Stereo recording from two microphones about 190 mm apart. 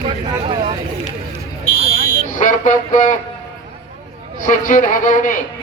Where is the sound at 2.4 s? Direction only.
40° left (ahead or behind).